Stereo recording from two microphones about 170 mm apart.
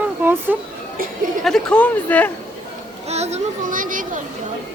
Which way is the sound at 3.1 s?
40° right (ahead or behind).